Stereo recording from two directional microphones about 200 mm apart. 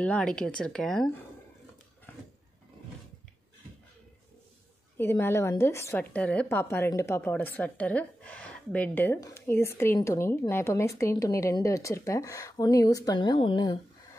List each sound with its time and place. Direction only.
0.0 s speech: 5° left (ahead or behind)
4.9 s a woman's voice: 10° left (ahead or behind)